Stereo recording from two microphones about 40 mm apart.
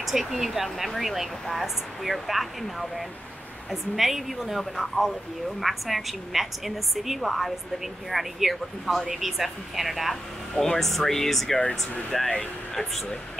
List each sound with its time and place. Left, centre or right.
0.0 s speech: centre
10.5 s speech: centre
12.1 s speech: centre